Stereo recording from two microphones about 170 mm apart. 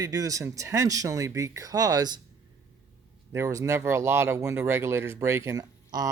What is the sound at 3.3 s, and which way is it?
Speech, 20° right (ahead or behind).